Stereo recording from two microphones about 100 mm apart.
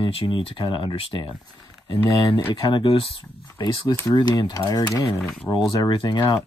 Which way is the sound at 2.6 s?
55° left (ahead or behind).